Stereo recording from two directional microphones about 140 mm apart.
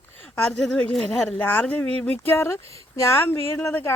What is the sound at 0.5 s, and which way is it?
A woman's voice, 5° left (ahead or behind).